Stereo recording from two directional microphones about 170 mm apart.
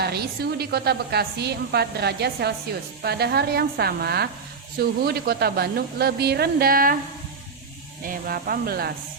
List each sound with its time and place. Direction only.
0.0 s a woman's voice: 70° right (ahead or behind)
8.0 s speech: 60° right (ahead or behind)